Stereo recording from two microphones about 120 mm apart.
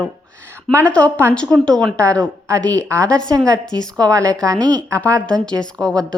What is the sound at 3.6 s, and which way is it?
Speech, 5° left (ahead or behind).